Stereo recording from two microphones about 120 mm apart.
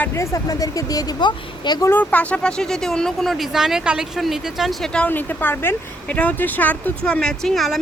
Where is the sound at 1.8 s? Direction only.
15° left (ahead or behind).